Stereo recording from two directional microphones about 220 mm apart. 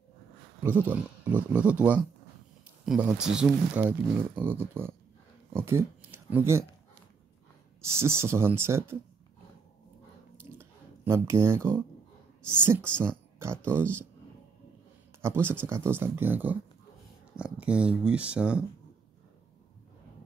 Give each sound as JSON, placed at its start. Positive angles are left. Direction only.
{"t": 0.6, "sound": "speech", "side_deg": -10}
{"t": 5.5, "sound": "speech", "side_deg": -20}
{"t": 5.8, "sound": "speech", "side_deg": -10}
{"t": 7.8, "sound": "speech", "side_deg": -10}
{"t": 10.6, "sound": "a sound", "side_deg": -10}
{"t": 12.6, "sound": "speech", "side_deg": -10}
{"t": 15.2, "sound": "speech", "side_deg": -10}